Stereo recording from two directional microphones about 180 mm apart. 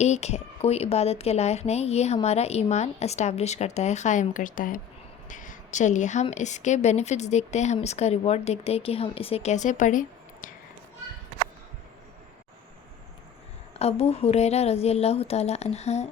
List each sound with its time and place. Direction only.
0.0 s a woman's voice: 40° left (ahead or behind)
13.7 s speech: 35° left (ahead or behind)